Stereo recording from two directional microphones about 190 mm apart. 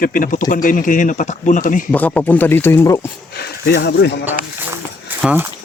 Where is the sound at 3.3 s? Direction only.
60° left (ahead or behind).